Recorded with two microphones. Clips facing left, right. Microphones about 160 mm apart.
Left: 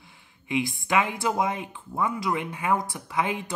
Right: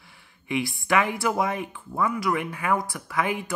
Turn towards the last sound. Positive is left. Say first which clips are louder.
# right 1 dB
turn(degrees=20)  # may be behind; listen again after turning